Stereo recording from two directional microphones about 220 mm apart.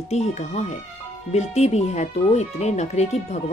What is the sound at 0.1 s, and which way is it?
Speech, 30° left (ahead or behind).